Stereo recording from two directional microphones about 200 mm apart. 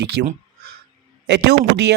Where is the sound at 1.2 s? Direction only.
60° right (ahead or behind).